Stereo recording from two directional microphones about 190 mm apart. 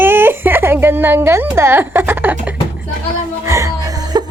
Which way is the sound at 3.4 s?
15° right (ahead or behind).